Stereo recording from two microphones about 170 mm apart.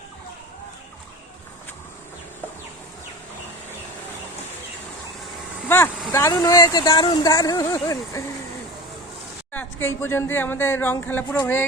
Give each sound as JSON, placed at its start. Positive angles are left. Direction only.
{"t": 5.6, "sound": "vehicle", "side_deg": 15}
{"t": 6.1, "sound": "speech", "side_deg": 15}
{"t": 9.5, "sound": "speech", "side_deg": 10}